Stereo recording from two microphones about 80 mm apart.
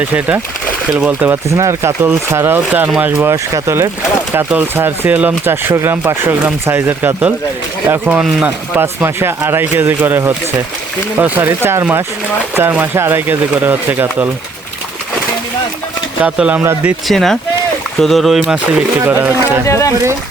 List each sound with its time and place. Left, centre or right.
0.0 s speech: right
1.5 s speech: right
16.2 s speech: centre
17.1 s speech: centre
18.4 s speech: centre
18.9 s speech: right
19.6 s speech: left